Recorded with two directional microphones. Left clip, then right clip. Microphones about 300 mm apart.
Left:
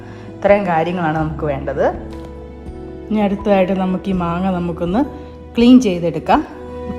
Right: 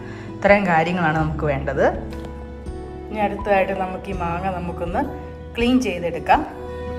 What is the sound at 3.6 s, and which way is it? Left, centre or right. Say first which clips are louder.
A woman's voice: left 4 dB; centre.